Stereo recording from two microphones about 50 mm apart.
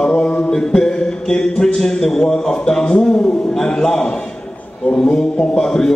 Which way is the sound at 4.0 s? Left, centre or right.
Centre.